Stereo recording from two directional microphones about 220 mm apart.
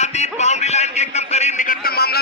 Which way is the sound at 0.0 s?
30° left (ahead or behind).